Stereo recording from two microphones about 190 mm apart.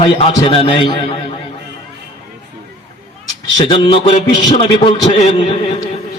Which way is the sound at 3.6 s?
25° left (ahead or behind).